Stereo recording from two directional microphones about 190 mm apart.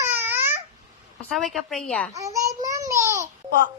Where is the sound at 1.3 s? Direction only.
Centre (ahead or behind).